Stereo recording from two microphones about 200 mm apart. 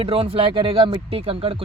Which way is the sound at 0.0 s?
25° right (ahead or behind).